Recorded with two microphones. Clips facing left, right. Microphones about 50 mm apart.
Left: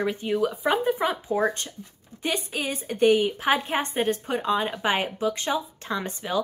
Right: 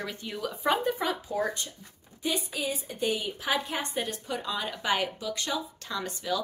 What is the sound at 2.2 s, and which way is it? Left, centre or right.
A woman's voice, left.